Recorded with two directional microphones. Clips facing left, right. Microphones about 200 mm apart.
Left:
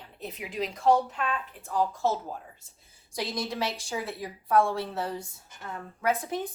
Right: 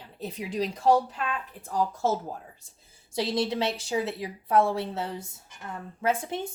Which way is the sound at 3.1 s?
30° right (ahead or behind).